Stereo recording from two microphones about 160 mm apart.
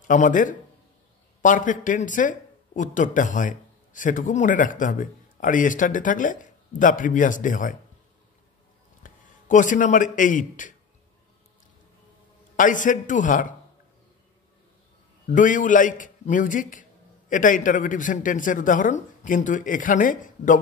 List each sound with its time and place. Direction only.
0.0 s speech: 55° left (ahead or behind)
9.0 s a sound: 55° left (ahead or behind)
10.1 s speech: 55° left (ahead or behind)
12.5 s speech: 55° left (ahead or behind)
15.2 s speech: 55° left (ahead or behind)